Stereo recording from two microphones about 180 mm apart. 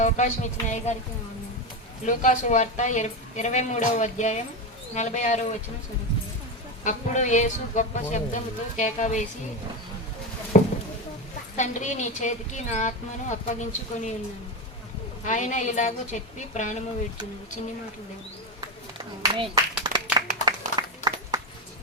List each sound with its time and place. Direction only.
0.0 s a woman's voice: 40° left (ahead or behind)
2.0 s a woman's voice: 45° left (ahead or behind)
6.8 s a woman's voice: 40° left (ahead or behind)
10.5 s a sound: 45° left (ahead or behind)
11.5 s a woman's voice: 40° left (ahead or behind)
15.2 s a woman's voice: 40° left (ahead or behind)
19.9 s clapping: 20° right (ahead or behind)
20.4 s a sound: 25° right (ahead or behind)